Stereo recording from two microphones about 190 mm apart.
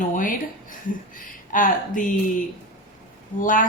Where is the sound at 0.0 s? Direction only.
45° left (ahead or behind).